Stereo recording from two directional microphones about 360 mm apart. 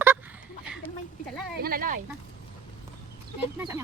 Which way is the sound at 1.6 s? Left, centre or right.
Right.